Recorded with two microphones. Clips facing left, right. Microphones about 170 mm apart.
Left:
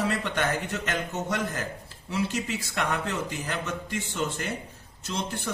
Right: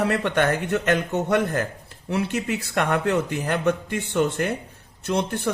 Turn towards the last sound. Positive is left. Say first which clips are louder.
# right 8 dB
turn(degrees=-60)  # may be behind; listen again after turning